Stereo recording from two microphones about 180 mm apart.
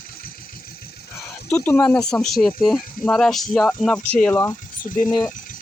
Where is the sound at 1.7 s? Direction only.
10° left (ahead or behind).